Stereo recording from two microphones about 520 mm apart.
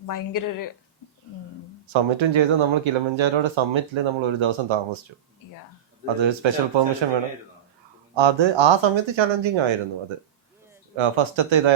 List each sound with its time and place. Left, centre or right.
0.1 s speech: left
1.9 s speech: right
6.1 s speech: right
10.9 s speech: right